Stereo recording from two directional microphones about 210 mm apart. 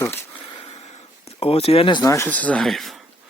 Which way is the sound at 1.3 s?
25° left (ahead or behind).